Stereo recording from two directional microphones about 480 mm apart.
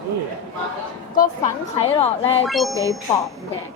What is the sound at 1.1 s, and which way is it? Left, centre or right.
A woman's voice, centre.